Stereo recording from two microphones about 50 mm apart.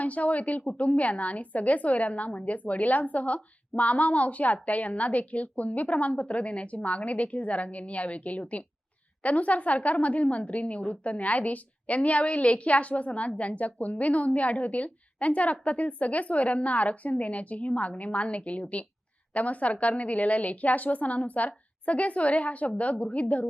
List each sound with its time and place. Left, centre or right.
0.0 s a woman's voice: left